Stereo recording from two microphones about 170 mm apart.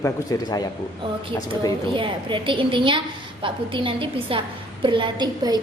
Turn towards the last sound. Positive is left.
turn(degrees=-25)  # may be behind; listen again after turning